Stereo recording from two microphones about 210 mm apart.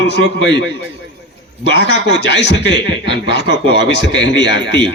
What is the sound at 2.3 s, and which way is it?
A man's voice, 55° left (ahead or behind).